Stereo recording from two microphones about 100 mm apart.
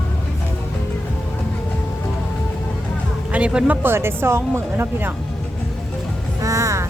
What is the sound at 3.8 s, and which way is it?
Speech, 25° right (ahead or behind).